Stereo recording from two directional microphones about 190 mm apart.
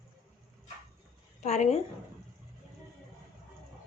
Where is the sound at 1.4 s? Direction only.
35° left (ahead or behind).